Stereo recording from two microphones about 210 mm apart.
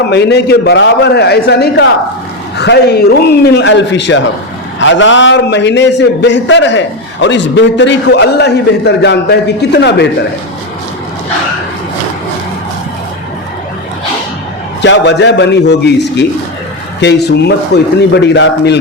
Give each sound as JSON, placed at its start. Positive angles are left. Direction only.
{"t": 0.1, "sound": "a man's voice", "side_deg": 55}
{"t": 14.8, "sound": "a man's voice", "side_deg": 55}